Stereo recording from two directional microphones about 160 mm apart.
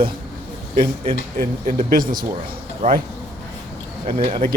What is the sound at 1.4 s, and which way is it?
Speech, 65° right (ahead or behind).